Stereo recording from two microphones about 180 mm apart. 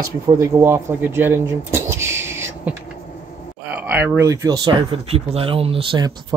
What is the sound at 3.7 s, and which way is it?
Speech, 10° right (ahead or behind).